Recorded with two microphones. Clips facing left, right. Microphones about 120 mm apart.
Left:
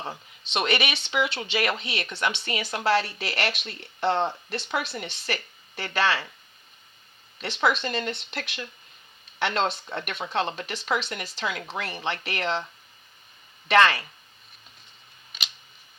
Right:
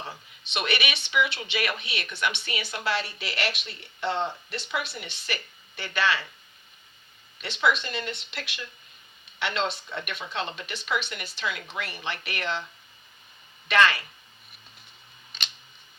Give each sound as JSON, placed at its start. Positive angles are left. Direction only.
{"t": 0.0, "sound": "speech", "side_deg": 35}
{"t": 7.6, "sound": "speech", "side_deg": 40}
{"t": 13.7, "sound": "speech", "side_deg": 30}